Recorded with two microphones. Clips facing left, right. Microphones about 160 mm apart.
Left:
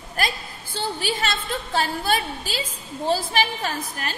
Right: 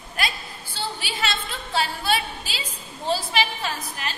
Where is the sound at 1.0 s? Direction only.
45° left (ahead or behind).